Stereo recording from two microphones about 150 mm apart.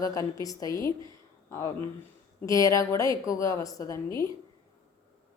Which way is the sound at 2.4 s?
25° left (ahead or behind).